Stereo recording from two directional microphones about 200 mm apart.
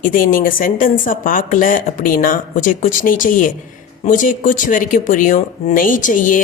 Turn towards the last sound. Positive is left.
turn(degrees=40)  # may be behind; listen again after turning